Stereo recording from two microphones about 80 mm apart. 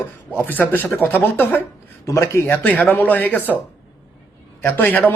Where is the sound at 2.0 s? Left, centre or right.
Left.